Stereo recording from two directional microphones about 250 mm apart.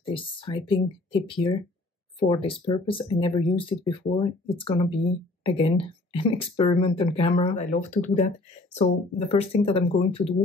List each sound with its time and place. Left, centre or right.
0.0 s speech: left
9.3 s speech: left